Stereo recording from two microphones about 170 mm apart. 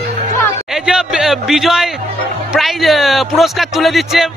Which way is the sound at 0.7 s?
5° right (ahead or behind).